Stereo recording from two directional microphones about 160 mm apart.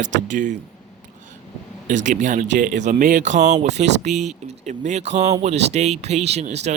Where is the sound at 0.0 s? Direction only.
50° right (ahead or behind).